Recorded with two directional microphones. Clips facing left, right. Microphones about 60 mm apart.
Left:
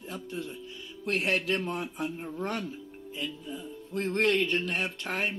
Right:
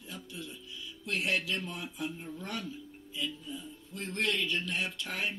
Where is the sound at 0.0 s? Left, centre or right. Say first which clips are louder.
Left 7 dB; left.